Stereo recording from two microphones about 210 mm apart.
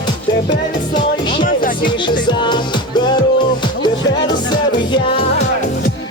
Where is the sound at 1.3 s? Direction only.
40° left (ahead or behind).